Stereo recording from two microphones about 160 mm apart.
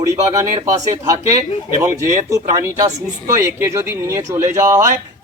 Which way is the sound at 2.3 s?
20° right (ahead or behind).